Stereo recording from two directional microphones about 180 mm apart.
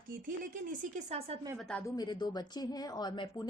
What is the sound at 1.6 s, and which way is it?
Speech, 5° left (ahead or behind).